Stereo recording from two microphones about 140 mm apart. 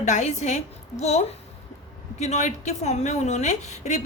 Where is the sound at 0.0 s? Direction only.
55° left (ahead or behind).